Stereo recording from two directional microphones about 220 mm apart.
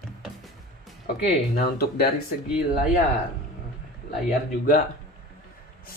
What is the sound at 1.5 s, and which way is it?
Speech, 45° left (ahead or behind).